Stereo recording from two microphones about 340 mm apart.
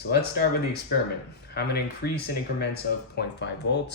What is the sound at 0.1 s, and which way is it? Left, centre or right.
Speech, left.